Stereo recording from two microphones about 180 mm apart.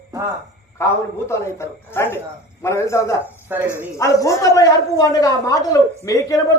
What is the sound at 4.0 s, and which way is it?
A woman's voice, 15° left (ahead or behind).